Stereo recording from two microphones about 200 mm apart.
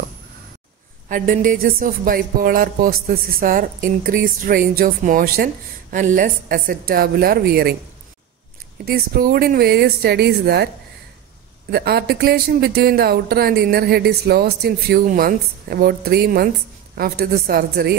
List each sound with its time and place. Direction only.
1.0 s a woman's voice: 40° right (ahead or behind)
8.8 s a woman's voice: 50° right (ahead or behind)
11.7 s a woman's voice: 50° right (ahead or behind)